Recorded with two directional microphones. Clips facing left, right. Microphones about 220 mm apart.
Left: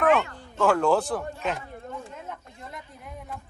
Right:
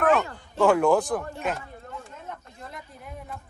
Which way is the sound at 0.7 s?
15° right (ahead or behind).